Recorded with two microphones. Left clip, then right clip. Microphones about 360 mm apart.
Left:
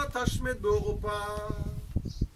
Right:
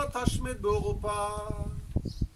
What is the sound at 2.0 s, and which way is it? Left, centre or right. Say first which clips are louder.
Music: right 3 dB; right.